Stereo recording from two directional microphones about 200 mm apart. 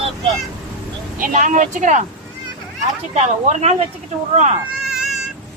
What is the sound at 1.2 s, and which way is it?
Speech, 40° right (ahead or behind).